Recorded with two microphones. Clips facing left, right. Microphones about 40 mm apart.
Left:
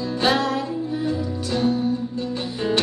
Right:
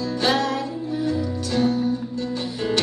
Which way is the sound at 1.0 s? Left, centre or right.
Centre.